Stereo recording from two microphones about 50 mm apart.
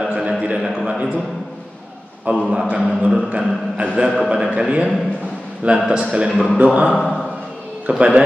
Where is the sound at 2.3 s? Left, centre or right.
Right.